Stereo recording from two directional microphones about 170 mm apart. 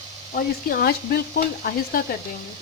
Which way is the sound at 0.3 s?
60° left (ahead or behind).